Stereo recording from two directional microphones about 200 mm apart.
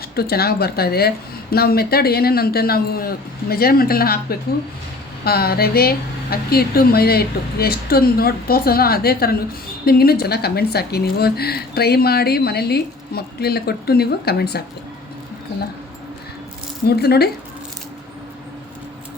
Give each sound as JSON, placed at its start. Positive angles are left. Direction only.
{"t": 0.2, "sound": "speech", "side_deg": 50}
{"t": 16.9, "sound": "speech", "side_deg": 55}